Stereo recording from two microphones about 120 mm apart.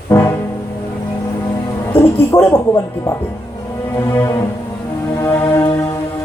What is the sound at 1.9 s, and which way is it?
Speech, 20° left (ahead or behind).